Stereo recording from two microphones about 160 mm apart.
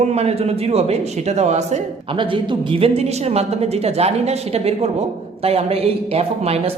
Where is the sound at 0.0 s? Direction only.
40° right (ahead or behind).